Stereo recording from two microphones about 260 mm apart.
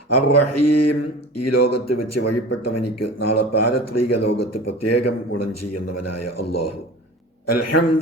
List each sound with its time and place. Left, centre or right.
0.1 s a man's voice: left